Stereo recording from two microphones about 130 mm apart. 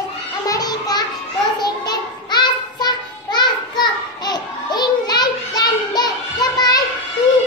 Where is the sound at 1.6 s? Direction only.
35° left (ahead or behind).